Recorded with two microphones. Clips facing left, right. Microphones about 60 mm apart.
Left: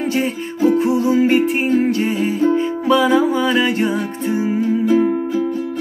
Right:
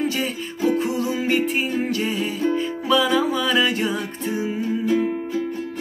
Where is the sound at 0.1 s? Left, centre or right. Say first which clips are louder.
Left 6 dB; left.